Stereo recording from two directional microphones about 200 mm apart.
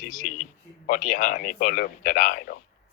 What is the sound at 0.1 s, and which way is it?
Speech, 40° left (ahead or behind).